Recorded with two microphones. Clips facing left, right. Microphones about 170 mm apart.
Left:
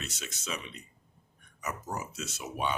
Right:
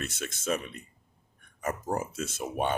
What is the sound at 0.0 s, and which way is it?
Speech, 50° right (ahead or behind).